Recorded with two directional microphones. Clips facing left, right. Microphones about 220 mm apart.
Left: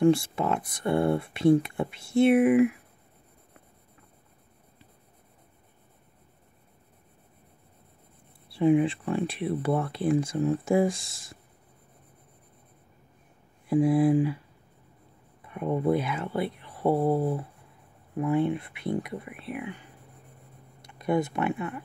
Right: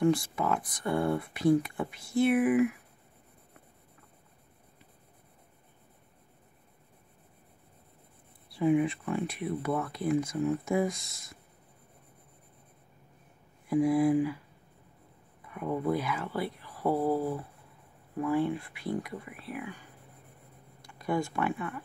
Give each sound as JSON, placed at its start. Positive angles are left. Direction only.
{"t": 0.0, "sound": "speech", "side_deg": 25}
{"t": 8.5, "sound": "speech", "side_deg": 30}
{"t": 13.7, "sound": "speech", "side_deg": 25}
{"t": 15.4, "sound": "speech", "side_deg": 25}
{"t": 20.8, "sound": "speech", "side_deg": 20}